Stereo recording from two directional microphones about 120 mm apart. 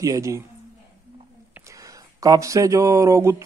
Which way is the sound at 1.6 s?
25° right (ahead or behind).